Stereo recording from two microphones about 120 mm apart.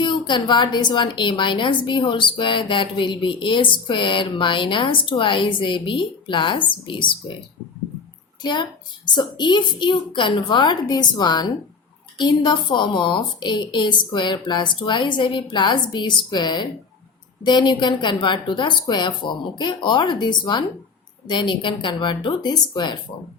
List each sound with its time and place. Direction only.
0.0 s a woman's voice: 40° left (ahead or behind)
8.4 s a woman's voice: 40° left (ahead or behind)